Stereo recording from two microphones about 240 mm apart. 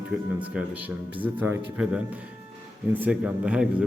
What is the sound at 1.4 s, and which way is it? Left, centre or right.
A man's voice, centre.